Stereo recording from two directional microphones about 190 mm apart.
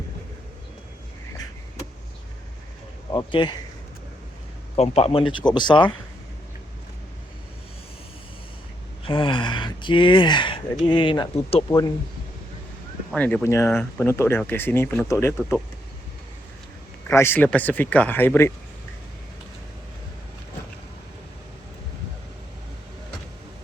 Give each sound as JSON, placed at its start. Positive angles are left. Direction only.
{"t": 3.1, "sound": "speech", "side_deg": 20}
{"t": 4.8, "sound": "speech", "side_deg": 30}
{"t": 9.0, "sound": "speech", "side_deg": 25}
{"t": 13.1, "sound": "speech", "side_deg": 10}
{"t": 17.1, "sound": "speech", "side_deg": 10}